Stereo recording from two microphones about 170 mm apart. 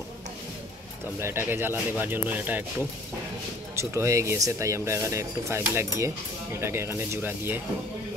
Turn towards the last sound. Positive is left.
turn(degrees=-10)  # may be behind; listen again after turning